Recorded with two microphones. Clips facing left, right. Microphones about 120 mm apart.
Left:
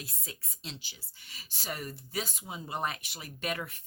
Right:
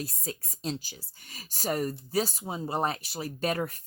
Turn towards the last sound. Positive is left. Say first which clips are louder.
# right 7 dB
turn(degrees=-35)  # may be behind; listen again after turning